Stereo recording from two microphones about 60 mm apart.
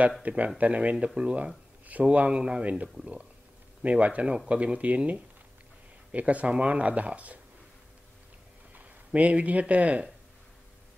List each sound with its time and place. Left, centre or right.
0.2 s speech: right
8.7 s speech: right